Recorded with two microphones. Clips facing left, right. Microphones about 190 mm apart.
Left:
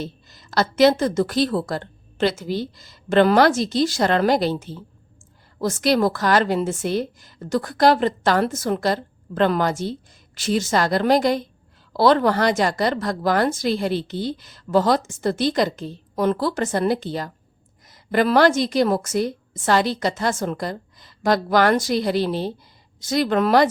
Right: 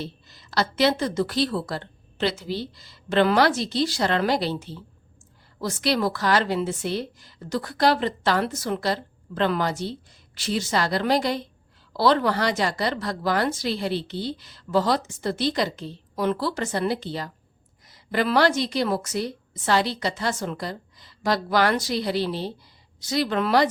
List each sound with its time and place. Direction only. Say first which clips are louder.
0.0 s a woman's voice: left 3 dB; 45° left (ahead or behind)